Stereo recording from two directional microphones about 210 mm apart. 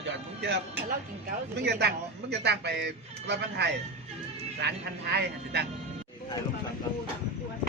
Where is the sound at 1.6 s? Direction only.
55° right (ahead or behind).